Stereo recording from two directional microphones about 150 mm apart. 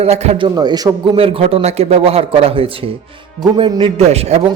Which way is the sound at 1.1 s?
40° right (ahead or behind).